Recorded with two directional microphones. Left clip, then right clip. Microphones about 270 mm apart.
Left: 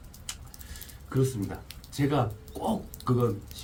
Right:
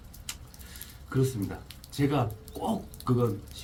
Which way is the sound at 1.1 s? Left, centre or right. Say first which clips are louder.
Left 1 dB; centre.